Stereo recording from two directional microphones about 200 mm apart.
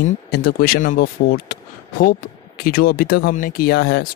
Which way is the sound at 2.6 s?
45° left (ahead or behind).